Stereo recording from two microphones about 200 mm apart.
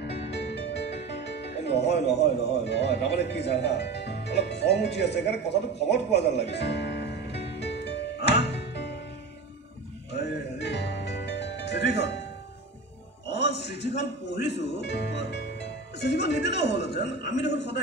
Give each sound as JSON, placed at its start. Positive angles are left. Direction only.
{"t": 0.0, "sound": "music", "side_deg": 60}
{"t": 10.1, "sound": "music", "side_deg": 55}
{"t": 13.3, "sound": "music", "side_deg": 60}